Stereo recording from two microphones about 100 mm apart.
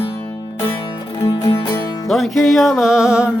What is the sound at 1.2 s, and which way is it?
Music, 60° left (ahead or behind).